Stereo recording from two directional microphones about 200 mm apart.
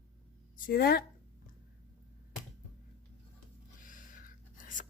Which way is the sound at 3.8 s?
40° left (ahead or behind).